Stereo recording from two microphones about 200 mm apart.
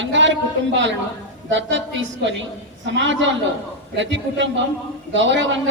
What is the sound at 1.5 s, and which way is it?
Speech, 65° right (ahead or behind).